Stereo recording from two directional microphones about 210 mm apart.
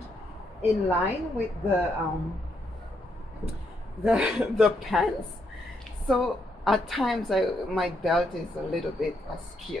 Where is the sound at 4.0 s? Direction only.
5° right (ahead or behind).